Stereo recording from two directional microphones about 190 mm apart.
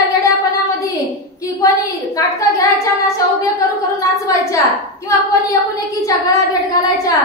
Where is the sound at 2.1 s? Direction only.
15° left (ahead or behind).